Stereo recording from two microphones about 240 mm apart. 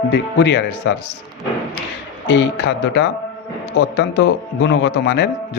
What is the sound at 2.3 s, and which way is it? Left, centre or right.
A man's voice, left.